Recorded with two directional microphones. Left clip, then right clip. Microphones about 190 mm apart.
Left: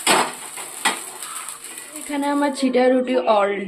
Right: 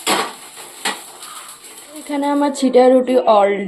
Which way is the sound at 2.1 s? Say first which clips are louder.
Right 3 dB; 15° right (ahead or behind).